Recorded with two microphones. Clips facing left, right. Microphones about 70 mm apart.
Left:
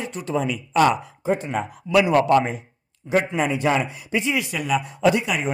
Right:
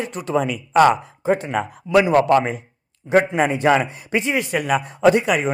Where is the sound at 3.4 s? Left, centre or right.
Right.